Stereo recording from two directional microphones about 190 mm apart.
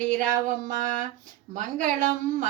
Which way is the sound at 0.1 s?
45° right (ahead or behind).